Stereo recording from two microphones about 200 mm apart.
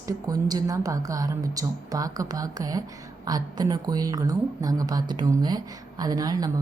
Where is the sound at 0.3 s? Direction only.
20° right (ahead or behind).